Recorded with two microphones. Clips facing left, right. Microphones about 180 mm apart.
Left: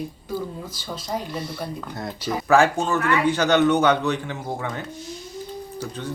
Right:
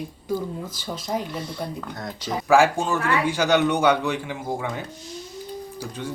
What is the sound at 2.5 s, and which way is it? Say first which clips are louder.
A man's voice: even; 10° right (ahead or behind).